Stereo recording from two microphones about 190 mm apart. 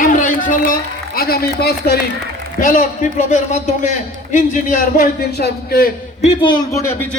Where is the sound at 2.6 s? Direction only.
45° left (ahead or behind).